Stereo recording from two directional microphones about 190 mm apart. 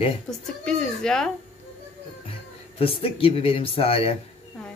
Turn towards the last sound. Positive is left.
turn(degrees=30)  # may be behind; listen again after turning